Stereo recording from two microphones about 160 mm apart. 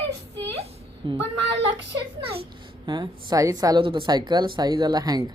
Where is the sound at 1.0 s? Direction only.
30° right (ahead or behind).